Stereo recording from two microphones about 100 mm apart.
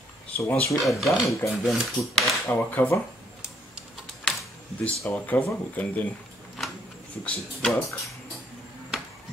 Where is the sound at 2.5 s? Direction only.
15° left (ahead or behind).